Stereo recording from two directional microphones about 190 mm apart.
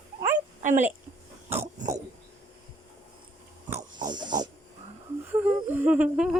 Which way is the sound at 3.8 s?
20° right (ahead or behind).